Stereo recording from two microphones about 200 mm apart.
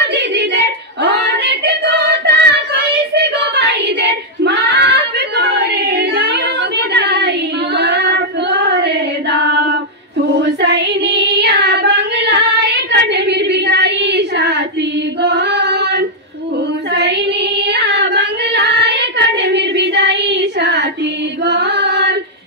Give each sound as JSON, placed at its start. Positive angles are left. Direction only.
{"t": 0.0, "sound": "a sound", "side_deg": -60}
{"t": 6.9, "sound": "child singing", "side_deg": -55}
{"t": 10.6, "sound": "child singing", "side_deg": -60}
{"t": 17.6, "sound": "child singing", "side_deg": -55}
{"t": 21.5, "sound": "chant", "side_deg": -60}